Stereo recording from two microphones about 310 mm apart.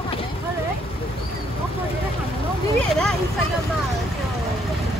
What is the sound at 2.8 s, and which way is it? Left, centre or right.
Speech, centre.